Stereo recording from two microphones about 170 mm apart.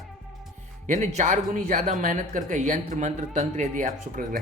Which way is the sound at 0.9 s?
45° right (ahead or behind).